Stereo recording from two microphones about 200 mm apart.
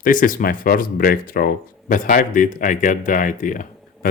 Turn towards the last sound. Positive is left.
turn(degrees=40)  # may be behind; listen again after turning